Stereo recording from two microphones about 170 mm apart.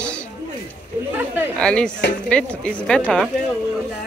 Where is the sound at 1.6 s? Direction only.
5° left (ahead or behind).